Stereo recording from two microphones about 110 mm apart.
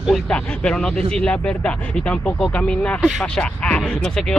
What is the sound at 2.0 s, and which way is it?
Speech, 10° left (ahead or behind).